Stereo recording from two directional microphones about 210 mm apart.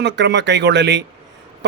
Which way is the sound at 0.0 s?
55° right (ahead or behind).